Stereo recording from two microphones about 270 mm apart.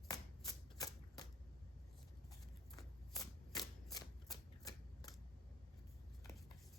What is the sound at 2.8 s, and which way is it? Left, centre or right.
Shuffling cards, centre.